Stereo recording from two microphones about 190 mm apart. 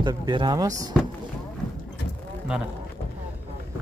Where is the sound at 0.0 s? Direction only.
20° right (ahead or behind).